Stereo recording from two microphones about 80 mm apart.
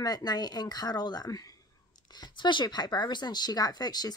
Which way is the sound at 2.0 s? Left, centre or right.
Left.